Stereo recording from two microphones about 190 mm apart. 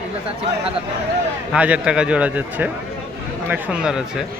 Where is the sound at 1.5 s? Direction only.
5° right (ahead or behind).